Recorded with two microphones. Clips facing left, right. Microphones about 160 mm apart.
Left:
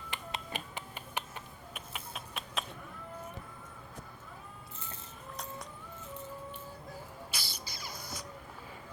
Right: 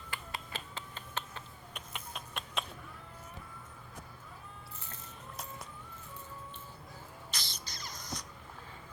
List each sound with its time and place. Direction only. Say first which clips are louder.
0.1 s finger snapping: left 2 dB; 20° left (ahead or behind)
1.7 s a sound: even; 5° left (ahead or behind)
7.3 s rodents: left 2 dB; 10° left (ahead or behind)